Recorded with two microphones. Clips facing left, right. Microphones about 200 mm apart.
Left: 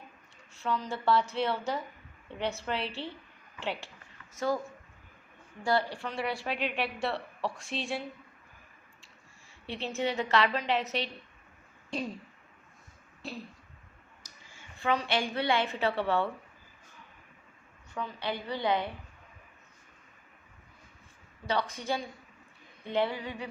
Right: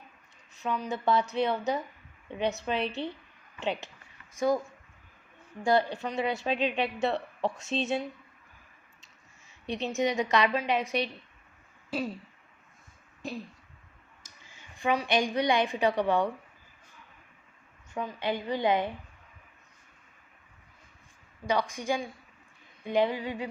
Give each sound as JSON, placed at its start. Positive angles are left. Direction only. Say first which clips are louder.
{"t": 0.5, "sound": "a woman's voice", "louder": "right 1 dB", "side_deg": -15}
{"t": 5.6, "sound": "a woman's voice", "louder": "right 4 dB", "side_deg": -20}
{"t": 9.6, "sound": "a woman's voice", "louder": "right 4 dB", "side_deg": -15}
{"t": 14.5, "sound": "a woman's voice", "louder": "right 2 dB", "side_deg": -15}
{"t": 18.2, "sound": "a woman's voice", "louder": "right 5 dB", "side_deg": -15}
{"t": 21.4, "sound": "a woman's voice", "louder": "right 3 dB", "side_deg": -15}